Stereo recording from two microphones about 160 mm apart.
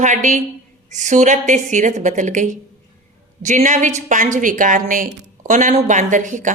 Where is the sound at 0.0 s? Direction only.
50° right (ahead or behind).